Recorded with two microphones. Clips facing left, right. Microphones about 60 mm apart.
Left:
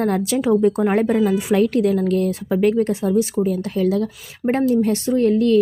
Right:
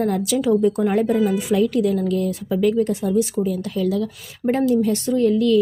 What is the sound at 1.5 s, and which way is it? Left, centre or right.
Speech, left.